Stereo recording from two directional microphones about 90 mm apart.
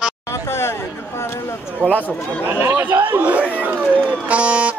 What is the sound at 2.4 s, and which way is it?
Speech, 25° right (ahead or behind).